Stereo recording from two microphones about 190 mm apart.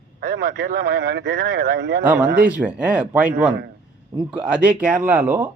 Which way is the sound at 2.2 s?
45° right (ahead or behind).